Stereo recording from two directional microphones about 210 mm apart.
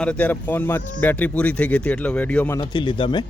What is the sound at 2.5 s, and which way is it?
Speech, 20° left (ahead or behind).